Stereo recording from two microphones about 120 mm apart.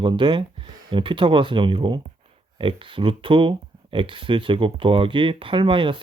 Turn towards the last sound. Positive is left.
turn(degrees=-45)  # may be behind; listen again after turning